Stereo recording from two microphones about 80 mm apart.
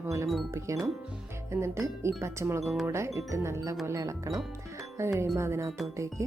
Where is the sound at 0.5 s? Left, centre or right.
Right.